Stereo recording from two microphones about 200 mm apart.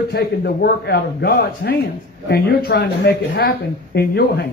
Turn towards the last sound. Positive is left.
turn(degrees=50)  # may be behind; listen again after turning